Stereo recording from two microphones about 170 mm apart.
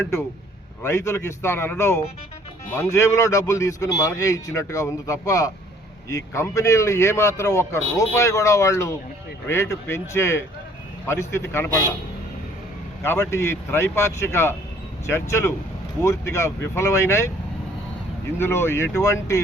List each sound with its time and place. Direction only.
0.0 s speech: 15° left (ahead or behind)
13.0 s speech: 15° left (ahead or behind)
18.3 s speech: 15° left (ahead or behind)